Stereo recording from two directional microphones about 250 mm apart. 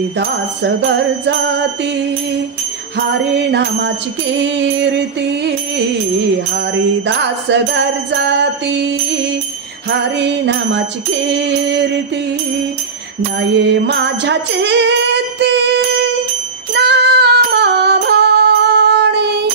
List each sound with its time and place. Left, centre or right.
0.2 s music: right
4.4 s music: right
7.1 s music: right
9.8 s music: right
13.8 s jingle bell: right
16.7 s music: right